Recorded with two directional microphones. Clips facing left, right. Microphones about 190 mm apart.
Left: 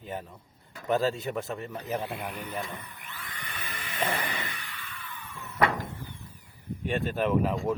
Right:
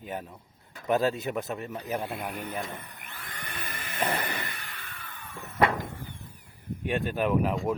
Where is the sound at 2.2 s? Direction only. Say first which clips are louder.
Right 1 dB; 45° right (ahead or behind).